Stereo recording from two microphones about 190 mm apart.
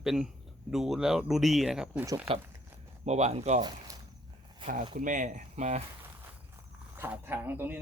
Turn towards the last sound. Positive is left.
turn(degrees=-10)  # may be behind; listen again after turning